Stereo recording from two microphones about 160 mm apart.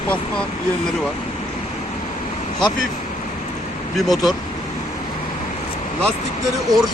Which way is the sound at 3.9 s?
Centre (ahead or behind).